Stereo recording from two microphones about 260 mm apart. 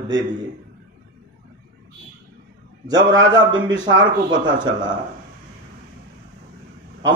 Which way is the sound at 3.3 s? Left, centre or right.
Centre.